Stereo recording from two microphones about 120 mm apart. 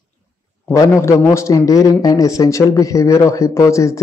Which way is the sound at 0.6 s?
25° left (ahead or behind).